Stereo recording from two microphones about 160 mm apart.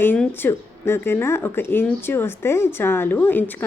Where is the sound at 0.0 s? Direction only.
10° left (ahead or behind).